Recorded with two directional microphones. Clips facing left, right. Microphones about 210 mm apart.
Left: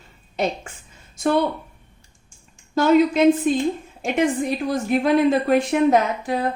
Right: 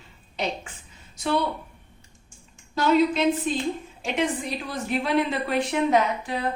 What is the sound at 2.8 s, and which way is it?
A woman's voice, 50° left (ahead or behind).